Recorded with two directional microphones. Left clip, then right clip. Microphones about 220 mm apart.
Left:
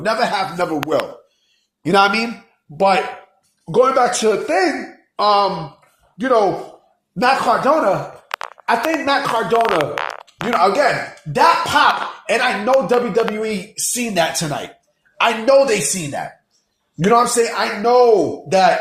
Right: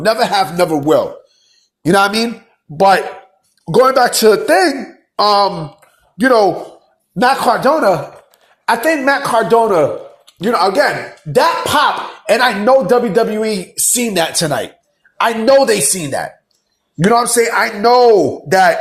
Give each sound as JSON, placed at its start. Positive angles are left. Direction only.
{"t": 0.0, "sound": "speech", "side_deg": -40}
{"t": 1.8, "sound": "speech", "side_deg": -30}